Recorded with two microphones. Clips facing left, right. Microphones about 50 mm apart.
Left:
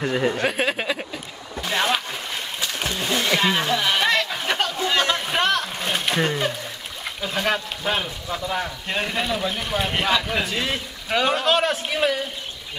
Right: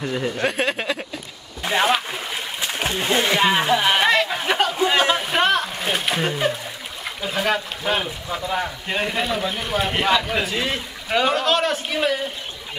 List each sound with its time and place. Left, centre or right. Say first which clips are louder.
0.1 s speech: left 3 dB; centre
0.4 s speech: right 1 dB; centre
1.6 s a sound: right 3 dB; centre
2.6 s a sound: right 3 dB; right
5.2 s splash: right 2 dB; centre
7.2 s speech: right 1 dB; centre